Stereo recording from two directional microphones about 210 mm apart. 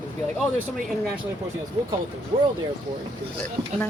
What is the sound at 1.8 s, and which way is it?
Speech, 20° right (ahead or behind).